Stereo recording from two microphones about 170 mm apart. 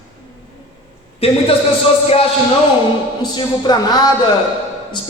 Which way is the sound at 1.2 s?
35° left (ahead or behind).